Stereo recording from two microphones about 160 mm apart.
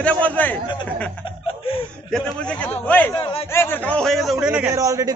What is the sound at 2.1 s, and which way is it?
Speech, 5° left (ahead or behind).